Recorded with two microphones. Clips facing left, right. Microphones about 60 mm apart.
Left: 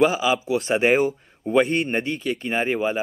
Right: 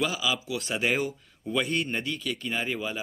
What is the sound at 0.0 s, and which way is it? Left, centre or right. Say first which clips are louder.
Speech: left 9 dB; left.